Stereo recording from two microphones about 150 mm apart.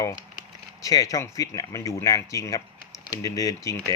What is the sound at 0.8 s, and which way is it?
Speech, 25° left (ahead or behind).